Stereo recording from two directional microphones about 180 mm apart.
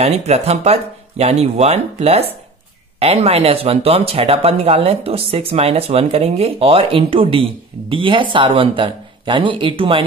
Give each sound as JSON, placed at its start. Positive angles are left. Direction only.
{"t": 0.0, "sound": "speech", "side_deg": -35}